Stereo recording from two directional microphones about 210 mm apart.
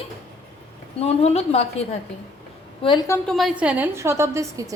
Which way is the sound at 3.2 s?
Centre (ahead or behind).